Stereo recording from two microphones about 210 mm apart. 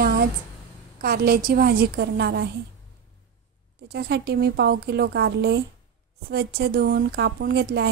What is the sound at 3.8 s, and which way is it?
A woman's voice, 50° right (ahead or behind).